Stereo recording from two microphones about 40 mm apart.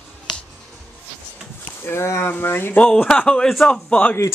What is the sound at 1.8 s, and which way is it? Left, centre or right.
Speech, left.